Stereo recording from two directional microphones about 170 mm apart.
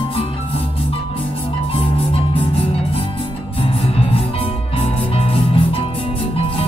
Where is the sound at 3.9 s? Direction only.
35° left (ahead or behind).